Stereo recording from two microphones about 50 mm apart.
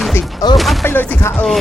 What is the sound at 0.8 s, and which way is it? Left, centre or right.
Music, left.